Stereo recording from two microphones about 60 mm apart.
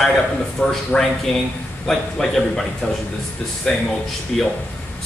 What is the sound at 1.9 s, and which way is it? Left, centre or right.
Speech, centre.